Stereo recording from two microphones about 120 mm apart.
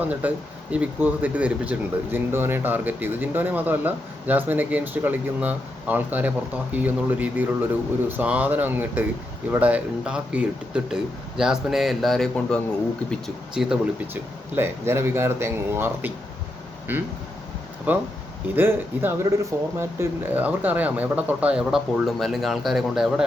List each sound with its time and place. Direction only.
0.1 s speech: 15° right (ahead or behind)
14.1 s speech: 20° right (ahead or behind); by 23.2 s centre (ahead or behind)